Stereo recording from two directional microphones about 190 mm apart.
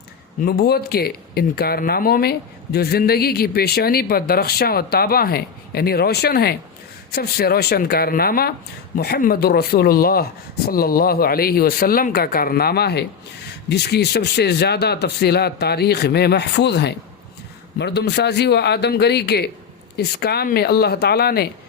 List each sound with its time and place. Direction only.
0.4 s speech: 55° left (ahead or behind)